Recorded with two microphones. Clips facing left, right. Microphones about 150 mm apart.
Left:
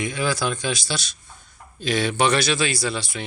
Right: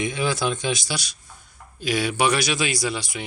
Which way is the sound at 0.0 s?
20° right (ahead or behind).